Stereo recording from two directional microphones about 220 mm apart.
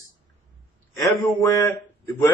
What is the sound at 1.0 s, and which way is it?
Speech, 15° left (ahead or behind).